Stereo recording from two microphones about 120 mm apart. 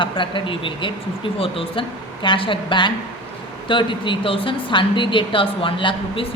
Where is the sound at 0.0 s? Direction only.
45° left (ahead or behind).